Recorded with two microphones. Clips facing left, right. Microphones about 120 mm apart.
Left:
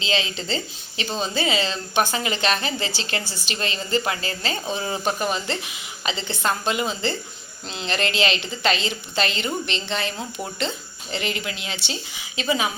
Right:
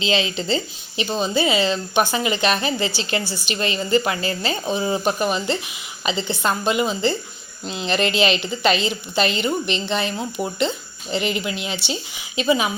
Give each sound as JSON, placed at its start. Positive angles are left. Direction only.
{"t": 0.0, "sound": "a woman's voice", "side_deg": -15}